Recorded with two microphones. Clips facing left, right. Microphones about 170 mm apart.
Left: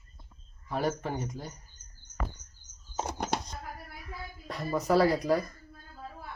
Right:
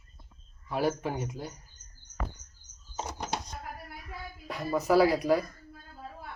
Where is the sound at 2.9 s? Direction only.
55° left (ahead or behind).